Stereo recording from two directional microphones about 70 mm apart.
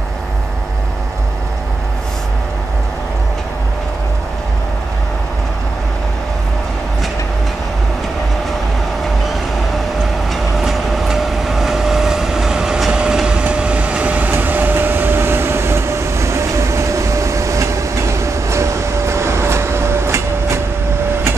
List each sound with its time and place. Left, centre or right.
10.3 s train: centre; by 20.6 s right